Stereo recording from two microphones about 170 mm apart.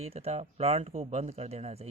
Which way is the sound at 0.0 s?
40° right (ahead or behind).